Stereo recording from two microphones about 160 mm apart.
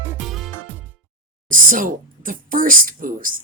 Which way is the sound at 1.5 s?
55° right (ahead or behind).